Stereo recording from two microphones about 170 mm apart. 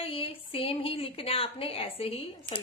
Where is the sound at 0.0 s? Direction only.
35° left (ahead or behind).